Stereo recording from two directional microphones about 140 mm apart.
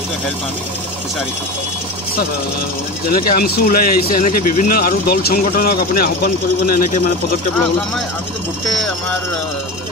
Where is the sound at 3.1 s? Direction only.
90° left.